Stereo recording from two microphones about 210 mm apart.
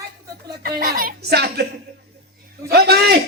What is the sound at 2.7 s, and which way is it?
Speech, 50° right (ahead or behind).